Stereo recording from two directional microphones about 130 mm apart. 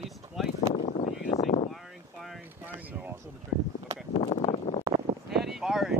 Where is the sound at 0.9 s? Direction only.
60° left (ahead or behind).